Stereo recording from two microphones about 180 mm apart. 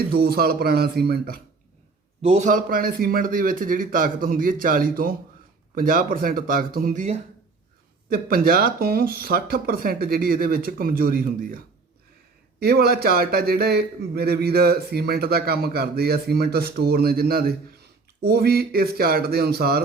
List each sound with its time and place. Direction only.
0.1 s speech: 60° right (ahead or behind)
2.2 s speech: 40° right (ahead or behind)
8.1 s speech: 55° right (ahead or behind)